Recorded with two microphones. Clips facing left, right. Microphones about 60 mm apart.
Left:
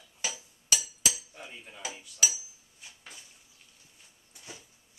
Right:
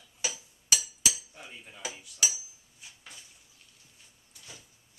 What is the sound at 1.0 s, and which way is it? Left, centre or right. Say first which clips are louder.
Cutlery: even; centre.